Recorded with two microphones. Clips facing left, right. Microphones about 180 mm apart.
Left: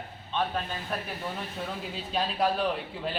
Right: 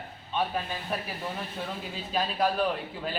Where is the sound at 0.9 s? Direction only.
5° right (ahead or behind).